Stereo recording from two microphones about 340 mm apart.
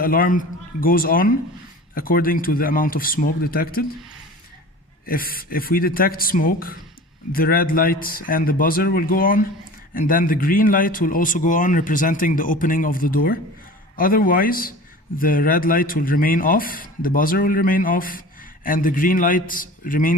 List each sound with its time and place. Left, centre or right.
0.0 s a man's voice: left
5.0 s a man's voice: left